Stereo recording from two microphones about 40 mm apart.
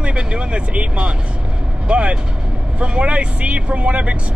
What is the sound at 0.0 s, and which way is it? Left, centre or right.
Speech, right.